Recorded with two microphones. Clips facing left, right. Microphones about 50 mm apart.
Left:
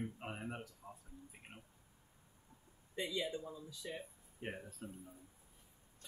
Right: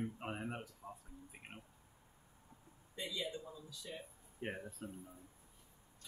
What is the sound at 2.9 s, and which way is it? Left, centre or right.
A man's voice, left.